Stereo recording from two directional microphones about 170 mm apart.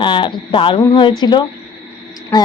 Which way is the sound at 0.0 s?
30° left (ahead or behind).